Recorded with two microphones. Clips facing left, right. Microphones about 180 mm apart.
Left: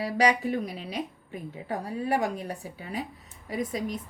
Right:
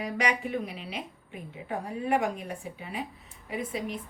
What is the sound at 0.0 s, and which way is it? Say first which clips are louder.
A woman's voice: left 5 dB; 35° left (ahead or behind).